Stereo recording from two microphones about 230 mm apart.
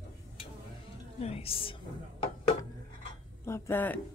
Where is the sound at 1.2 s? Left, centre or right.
Left.